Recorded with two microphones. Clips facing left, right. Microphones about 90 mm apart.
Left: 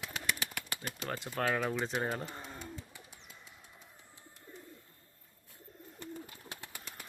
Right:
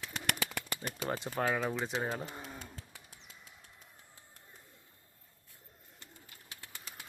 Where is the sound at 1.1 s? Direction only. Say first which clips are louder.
Even; 15° right (ahead or behind).